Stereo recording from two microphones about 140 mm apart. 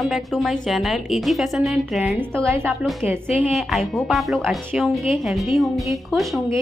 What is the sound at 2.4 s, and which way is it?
Speech, 20° right (ahead or behind).